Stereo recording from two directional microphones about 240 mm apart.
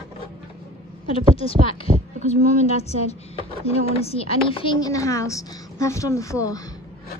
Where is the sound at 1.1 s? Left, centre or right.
Left.